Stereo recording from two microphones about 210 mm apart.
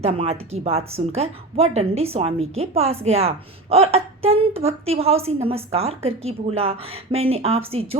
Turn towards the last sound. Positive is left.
turn(degrees=-30)  # may be behind; listen again after turning